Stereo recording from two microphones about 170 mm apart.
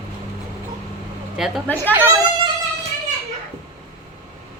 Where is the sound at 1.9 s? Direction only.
10° right (ahead or behind).